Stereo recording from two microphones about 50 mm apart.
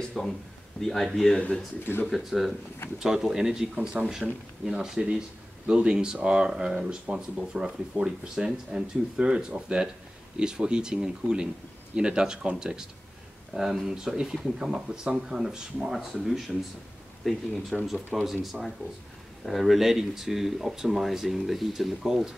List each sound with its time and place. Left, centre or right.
0.2 s a man's voice: centre
1.3 s speech: left
2.0 s speech: centre
13.5 s speech: right
13.8 s speech: centre
16.1 s speech: centre